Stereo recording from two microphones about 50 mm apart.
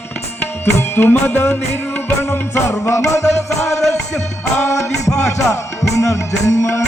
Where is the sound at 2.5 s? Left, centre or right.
Left.